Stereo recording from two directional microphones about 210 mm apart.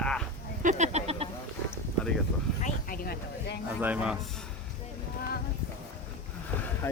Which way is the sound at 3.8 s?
5° right (ahead or behind).